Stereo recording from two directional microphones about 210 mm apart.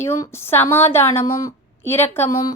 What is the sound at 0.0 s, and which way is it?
A woman's voice, 10° left (ahead or behind).